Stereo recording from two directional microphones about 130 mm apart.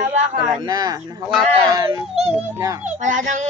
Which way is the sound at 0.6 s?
30° right (ahead or behind).